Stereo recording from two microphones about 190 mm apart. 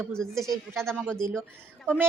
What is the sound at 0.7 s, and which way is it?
Speech, 5° left (ahead or behind).